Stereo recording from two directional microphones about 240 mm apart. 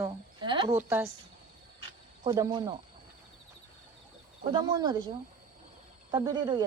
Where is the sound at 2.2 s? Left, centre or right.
Centre.